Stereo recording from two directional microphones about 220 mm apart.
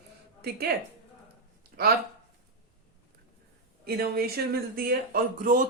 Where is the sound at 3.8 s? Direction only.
45° right (ahead or behind).